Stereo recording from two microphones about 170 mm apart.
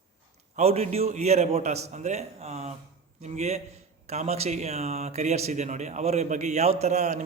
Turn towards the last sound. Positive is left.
turn(degrees=-40)  # may be behind; listen again after turning